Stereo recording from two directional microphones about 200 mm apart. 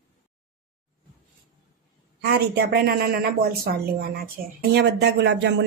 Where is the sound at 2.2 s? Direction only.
55° right (ahead or behind).